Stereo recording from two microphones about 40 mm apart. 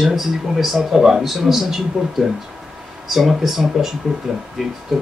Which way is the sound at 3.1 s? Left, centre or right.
Centre.